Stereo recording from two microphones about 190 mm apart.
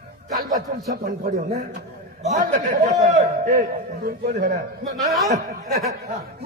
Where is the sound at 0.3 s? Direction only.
45° right (ahead or behind).